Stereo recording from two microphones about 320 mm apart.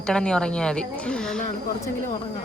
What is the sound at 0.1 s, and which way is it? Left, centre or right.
Speech, centre.